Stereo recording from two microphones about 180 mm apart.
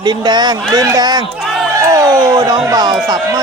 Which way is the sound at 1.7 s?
20° right (ahead or behind).